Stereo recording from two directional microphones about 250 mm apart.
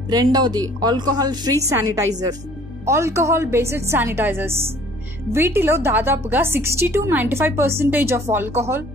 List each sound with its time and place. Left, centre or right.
0.1 s a woman's voice: centre